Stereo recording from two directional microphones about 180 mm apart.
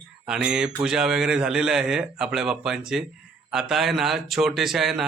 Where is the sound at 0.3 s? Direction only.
5° right (ahead or behind).